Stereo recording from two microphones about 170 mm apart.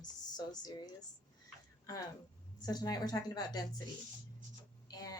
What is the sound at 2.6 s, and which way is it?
A woman's voice, 25° left (ahead or behind).